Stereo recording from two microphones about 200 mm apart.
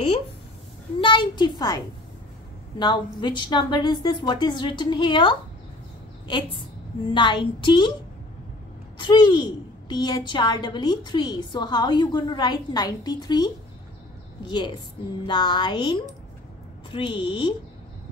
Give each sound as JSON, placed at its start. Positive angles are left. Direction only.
{"t": 1.0, "sound": "a woman's voice", "side_deg": 25}
{"t": 2.8, "sound": "a woman's voice", "side_deg": 20}
{"t": 9.0, "sound": "a woman's voice", "side_deg": 20}